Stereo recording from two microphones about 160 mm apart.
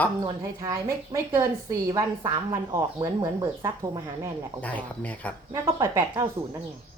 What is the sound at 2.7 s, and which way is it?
Speech, 25° right (ahead or behind).